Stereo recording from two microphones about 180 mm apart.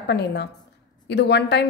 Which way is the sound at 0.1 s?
70° left (ahead or behind).